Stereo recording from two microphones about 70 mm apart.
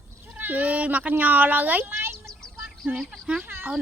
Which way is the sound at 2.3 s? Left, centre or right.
Centre.